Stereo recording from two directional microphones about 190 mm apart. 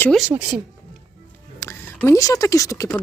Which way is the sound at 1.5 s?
15° left (ahead or behind).